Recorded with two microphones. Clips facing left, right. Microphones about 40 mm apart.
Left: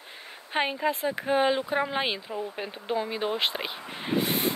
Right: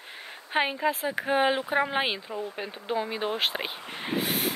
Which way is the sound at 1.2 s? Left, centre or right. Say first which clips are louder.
Even; centre.